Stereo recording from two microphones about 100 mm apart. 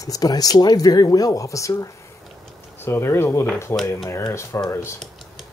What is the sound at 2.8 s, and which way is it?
Speech, 25° left (ahead or behind).